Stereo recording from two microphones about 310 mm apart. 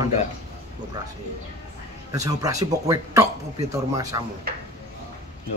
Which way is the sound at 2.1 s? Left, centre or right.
Centre.